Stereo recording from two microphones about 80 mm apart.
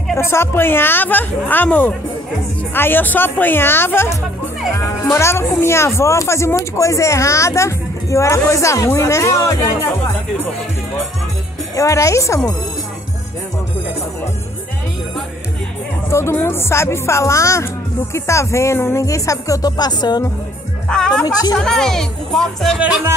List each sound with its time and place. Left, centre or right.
0.1 s a woman's voice: left
11.7 s speech: left
16.1 s speech: left
20.9 s speech: centre
21.3 s speech: left
21.5 s speech: centre
22.8 s music: centre